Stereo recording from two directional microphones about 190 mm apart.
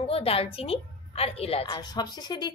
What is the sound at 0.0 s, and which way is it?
A woman's voice, 30° left (ahead or behind).